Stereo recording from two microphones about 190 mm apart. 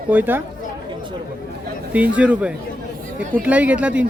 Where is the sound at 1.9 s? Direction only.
5° right (ahead or behind).